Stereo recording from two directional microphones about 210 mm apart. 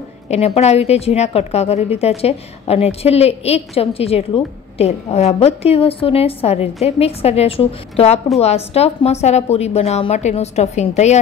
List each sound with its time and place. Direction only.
0.3 s a woman's voice: 30° left (ahead or behind)